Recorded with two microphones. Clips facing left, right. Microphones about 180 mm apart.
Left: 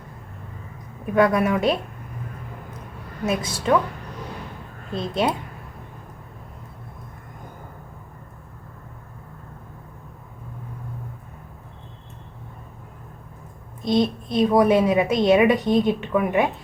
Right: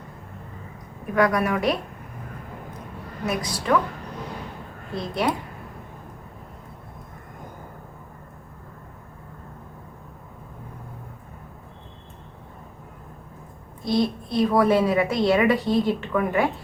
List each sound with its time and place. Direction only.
1.1 s a woman's voice: 25° left (ahead or behind)
3.2 s a woman's voice: 25° left (ahead or behind)
4.9 s a woman's voice: 25° left (ahead or behind)
13.8 s a woman's voice: 20° left (ahead or behind)